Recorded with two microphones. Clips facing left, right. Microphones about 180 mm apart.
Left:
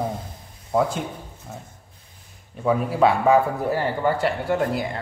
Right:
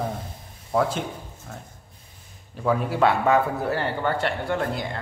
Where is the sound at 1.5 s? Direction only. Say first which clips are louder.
Left 2 dB; 5° left (ahead or behind).